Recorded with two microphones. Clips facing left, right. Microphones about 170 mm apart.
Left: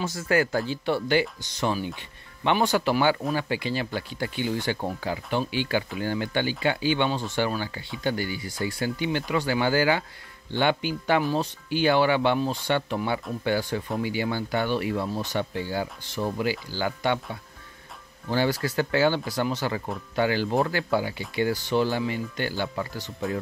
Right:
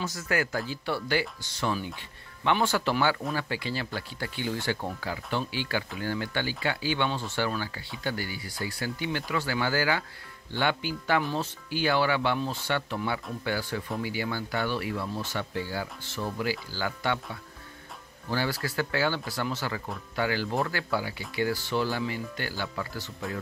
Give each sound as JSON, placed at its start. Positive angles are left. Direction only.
{"t": 0.0, "sound": "speech", "side_deg": 30}
{"t": 18.3, "sound": "speech", "side_deg": 20}